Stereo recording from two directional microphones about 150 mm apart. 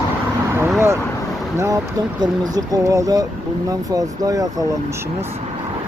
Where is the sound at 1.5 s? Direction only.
20° right (ahead or behind).